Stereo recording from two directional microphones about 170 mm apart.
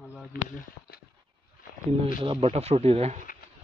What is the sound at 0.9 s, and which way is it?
Dog, 65° left (ahead or behind).